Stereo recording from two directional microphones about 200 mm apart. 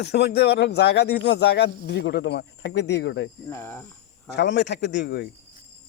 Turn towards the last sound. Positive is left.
turn(degrees=55)  # may be behind; listen again after turning